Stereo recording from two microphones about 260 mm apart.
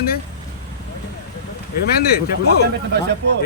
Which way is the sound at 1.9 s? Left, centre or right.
Left.